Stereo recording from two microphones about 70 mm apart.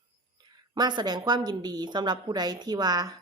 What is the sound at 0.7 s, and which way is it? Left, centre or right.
A woman's voice, right.